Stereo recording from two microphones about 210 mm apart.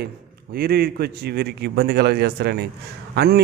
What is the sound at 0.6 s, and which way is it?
Speech, 50° right (ahead or behind).